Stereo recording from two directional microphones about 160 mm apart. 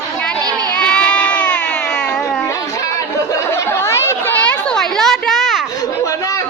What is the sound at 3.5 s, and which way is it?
Chatter, 15° left (ahead or behind).